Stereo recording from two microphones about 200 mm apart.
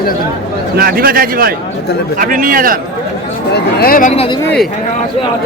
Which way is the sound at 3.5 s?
50° left (ahead or behind).